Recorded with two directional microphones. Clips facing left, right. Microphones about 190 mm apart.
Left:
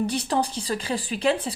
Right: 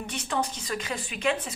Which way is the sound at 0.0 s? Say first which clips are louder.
Left 6 dB; 35° left (ahead or behind).